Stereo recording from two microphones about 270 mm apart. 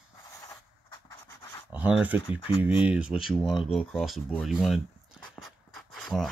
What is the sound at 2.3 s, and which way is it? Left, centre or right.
Speech, centre.